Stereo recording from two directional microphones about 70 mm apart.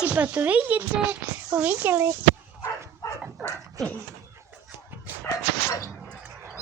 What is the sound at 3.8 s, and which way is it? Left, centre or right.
Dog, right.